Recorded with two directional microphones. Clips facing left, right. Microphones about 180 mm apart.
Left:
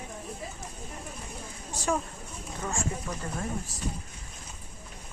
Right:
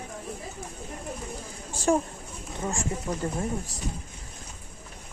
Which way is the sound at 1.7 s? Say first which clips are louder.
Right 6 dB; 30° right (ahead or behind).